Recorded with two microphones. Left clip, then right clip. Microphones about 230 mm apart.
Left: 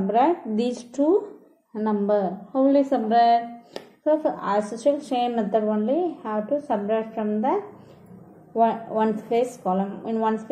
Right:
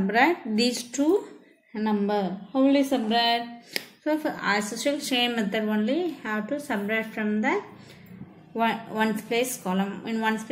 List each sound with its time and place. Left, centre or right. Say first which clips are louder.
0.1 s speech: left 2 dB; right
8.5 s speech: left 4 dB; right